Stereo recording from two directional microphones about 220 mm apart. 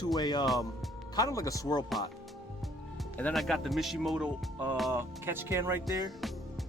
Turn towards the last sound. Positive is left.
turn(degrees=-15)  # may be behind; listen again after turning